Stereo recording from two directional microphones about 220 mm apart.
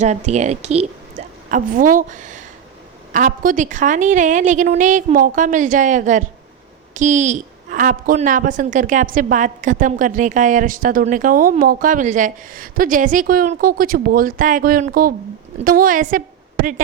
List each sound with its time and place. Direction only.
0.0 s a woman's voice: 30° right (ahead or behind)